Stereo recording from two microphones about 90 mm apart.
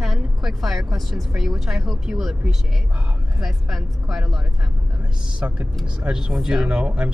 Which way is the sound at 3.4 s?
Centre (ahead or behind).